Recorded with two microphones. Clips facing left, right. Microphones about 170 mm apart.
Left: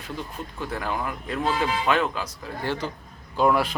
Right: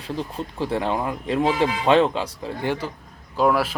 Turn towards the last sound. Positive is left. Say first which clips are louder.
# right 1 dB
turn(degrees=-5)  # may be behind; listen again after turning